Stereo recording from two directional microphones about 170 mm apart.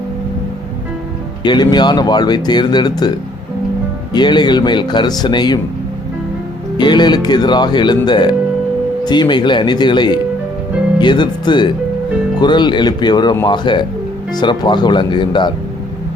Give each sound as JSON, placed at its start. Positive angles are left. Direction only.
{"t": 1.5, "sound": "speech", "side_deg": 25}
{"t": 4.1, "sound": "speech", "side_deg": 25}
{"t": 6.7, "sound": "speech", "side_deg": 25}